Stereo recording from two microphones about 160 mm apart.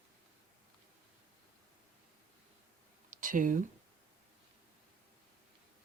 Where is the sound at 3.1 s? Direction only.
55° right (ahead or behind).